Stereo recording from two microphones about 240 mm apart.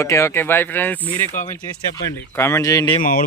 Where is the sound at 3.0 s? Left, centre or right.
Left.